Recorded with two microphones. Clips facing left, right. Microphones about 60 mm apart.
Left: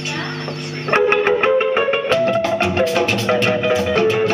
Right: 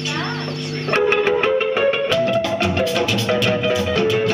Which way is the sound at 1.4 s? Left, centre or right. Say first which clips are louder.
Left 2 dB; left.